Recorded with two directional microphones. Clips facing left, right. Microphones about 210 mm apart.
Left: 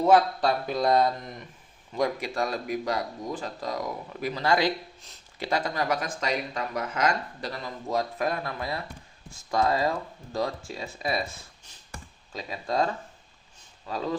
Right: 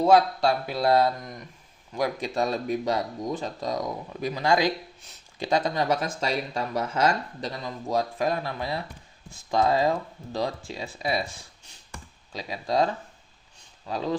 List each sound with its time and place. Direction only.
0.0 s speech: 10° right (ahead or behind)
2.2 s speech: 25° right (ahead or behind)
12.4 s speech: 15° right (ahead or behind)